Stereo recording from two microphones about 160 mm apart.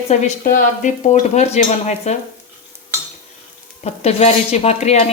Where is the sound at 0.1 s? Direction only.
45° left (ahead or behind).